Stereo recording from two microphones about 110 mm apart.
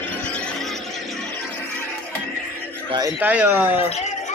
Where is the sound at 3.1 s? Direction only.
10° right (ahead or behind).